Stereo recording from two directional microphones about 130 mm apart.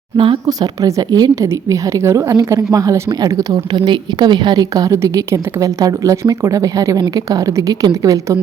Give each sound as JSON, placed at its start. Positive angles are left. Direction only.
{"t": 0.4, "sound": "a woman's voice", "side_deg": -30}